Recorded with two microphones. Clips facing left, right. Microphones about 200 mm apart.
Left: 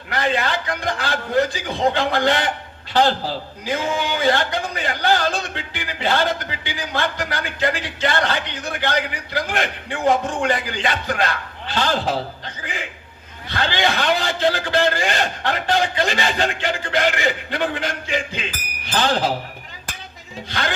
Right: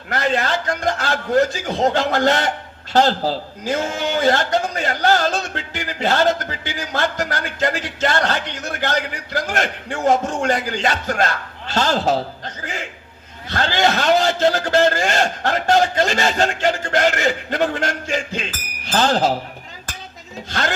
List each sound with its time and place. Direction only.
0.1 s a man's voice: 45° right (ahead or behind)
13.5 s a man's voice: 45° right (ahead or behind)
20.5 s a man's voice: 45° right (ahead or behind)